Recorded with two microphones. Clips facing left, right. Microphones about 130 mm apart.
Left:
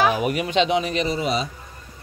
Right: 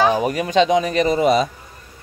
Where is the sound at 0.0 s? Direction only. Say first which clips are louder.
Right 3 dB; 35° right (ahead or behind).